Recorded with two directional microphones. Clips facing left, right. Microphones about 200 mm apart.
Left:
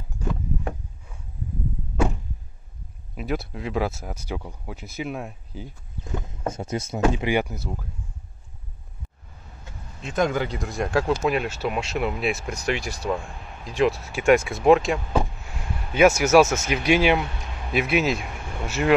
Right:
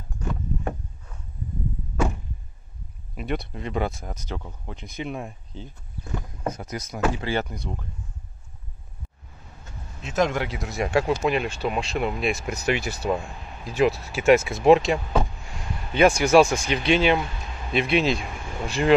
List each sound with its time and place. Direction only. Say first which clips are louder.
0.3 s a sound: even; 5° left (ahead or behind)
3.2 s speech: left 1 dB; centre (ahead or behind)
6.2 s speech: even; 25° left (ahead or behind); by 7.9 s 5° left (ahead or behind)
10.0 s speech: even; centre (ahead or behind)
15.9 s speech: left 1 dB; 5° left (ahead or behind)